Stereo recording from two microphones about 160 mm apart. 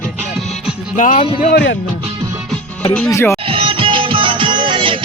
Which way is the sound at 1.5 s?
90° left.